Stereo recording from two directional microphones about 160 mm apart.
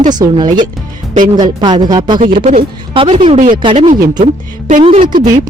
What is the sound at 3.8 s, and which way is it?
Speech, 50° right (ahead or behind).